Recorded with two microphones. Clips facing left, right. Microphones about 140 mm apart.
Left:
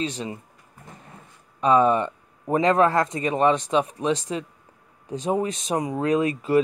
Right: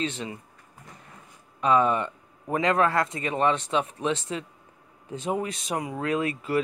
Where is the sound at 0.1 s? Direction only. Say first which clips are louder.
Left 3 dB; 35° left (ahead or behind).